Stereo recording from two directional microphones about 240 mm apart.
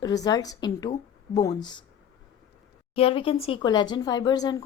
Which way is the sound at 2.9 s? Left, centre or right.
Left.